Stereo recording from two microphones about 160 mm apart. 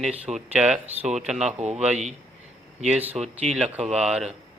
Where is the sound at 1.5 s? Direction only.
40° right (ahead or behind).